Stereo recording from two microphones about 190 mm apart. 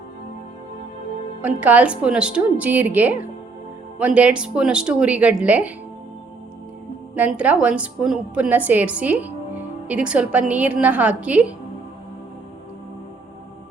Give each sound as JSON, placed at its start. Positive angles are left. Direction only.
{"t": 1.4, "sound": "a woman's voice", "side_deg": -10}
{"t": 7.2, "sound": "a woman's voice", "side_deg": -5}